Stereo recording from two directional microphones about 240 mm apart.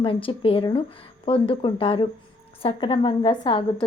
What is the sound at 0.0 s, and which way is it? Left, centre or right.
A woman's voice, left.